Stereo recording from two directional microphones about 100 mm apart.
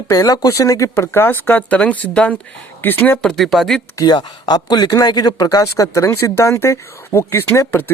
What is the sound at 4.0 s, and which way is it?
Speech, 45° left (ahead or behind).